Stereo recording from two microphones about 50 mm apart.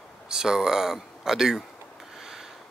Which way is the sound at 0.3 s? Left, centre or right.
Centre.